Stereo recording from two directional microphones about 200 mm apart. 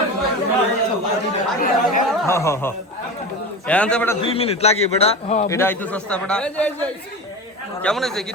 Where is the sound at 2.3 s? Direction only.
15° left (ahead or behind).